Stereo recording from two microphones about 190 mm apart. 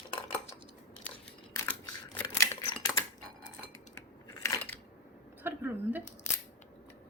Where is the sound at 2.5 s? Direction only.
25° left (ahead or behind).